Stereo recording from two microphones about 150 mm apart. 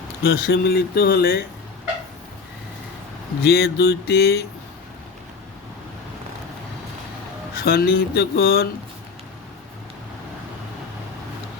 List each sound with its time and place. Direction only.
0.2 s speech: 90° left
3.4 s speech: 90° left
7.6 s speech: 90° left